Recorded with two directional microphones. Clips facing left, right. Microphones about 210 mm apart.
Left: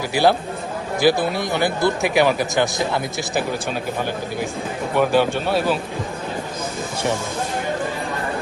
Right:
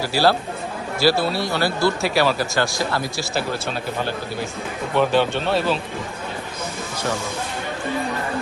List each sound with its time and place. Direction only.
0.0 s speech: 15° left (ahead or behind)
4.9 s speech: 10° left (ahead or behind)